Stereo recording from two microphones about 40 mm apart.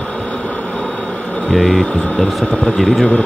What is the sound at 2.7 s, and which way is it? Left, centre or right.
Speech, centre.